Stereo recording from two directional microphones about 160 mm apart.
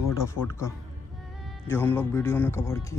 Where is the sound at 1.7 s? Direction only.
15° left (ahead or behind).